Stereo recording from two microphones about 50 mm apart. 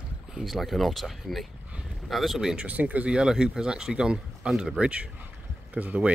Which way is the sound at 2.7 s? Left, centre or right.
Right.